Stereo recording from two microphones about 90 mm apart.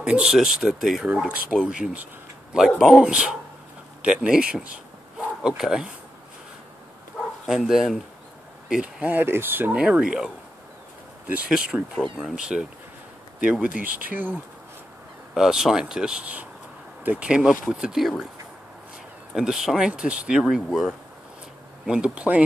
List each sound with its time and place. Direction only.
0.0 s speech: 10° right (ahead or behind)
7.4 s speech: 5° right (ahead or behind); by 9.8 s 25° right (ahead or behind)
9.8 s speech: 10° right (ahead or behind)
15.3 s speech: 5° right (ahead or behind)
19.3 s speech: 5° right (ahead or behind)